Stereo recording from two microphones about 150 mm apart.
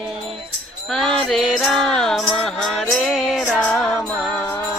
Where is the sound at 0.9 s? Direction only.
5° left (ahead or behind).